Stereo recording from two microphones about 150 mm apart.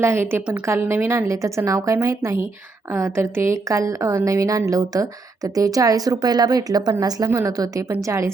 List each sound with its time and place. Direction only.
0.0 s a woman's voice: 15° right (ahead or behind)